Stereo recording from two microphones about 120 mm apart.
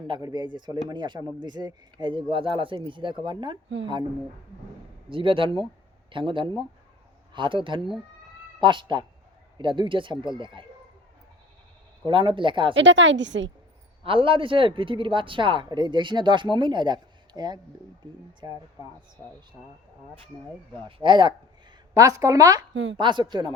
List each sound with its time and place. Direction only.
0.1 s speech: 35° right (ahead or behind)
5.0 s speech: 45° right (ahead or behind)
12.0 s speech: 45° right (ahead or behind)
14.0 s speech: 45° right (ahead or behind)
20.8 s speech: 40° right (ahead or behind)
21.9 s speech: 30° right (ahead or behind)